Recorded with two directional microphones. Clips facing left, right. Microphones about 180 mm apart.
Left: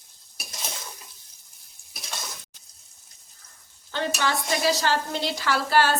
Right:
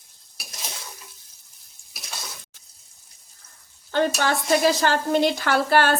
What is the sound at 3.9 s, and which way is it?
A woman's voice, 50° right (ahead or behind).